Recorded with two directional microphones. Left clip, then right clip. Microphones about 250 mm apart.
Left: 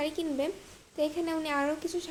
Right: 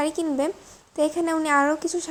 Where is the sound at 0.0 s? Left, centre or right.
Right.